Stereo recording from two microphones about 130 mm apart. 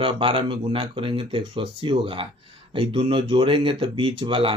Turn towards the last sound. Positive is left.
turn(degrees=-45)  # may be behind; listen again after turning